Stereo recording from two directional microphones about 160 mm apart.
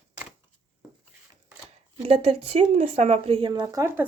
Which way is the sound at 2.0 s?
40° right (ahead or behind).